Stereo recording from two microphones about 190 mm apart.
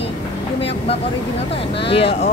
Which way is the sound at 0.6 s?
30° left (ahead or behind).